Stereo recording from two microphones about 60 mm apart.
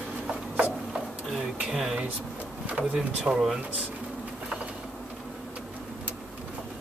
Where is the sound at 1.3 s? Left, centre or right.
Centre.